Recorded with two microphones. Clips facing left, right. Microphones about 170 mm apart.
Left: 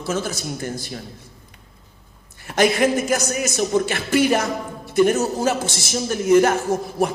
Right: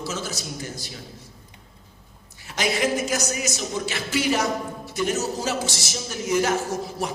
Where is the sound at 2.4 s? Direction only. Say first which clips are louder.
Left 7 dB; 55° left (ahead or behind).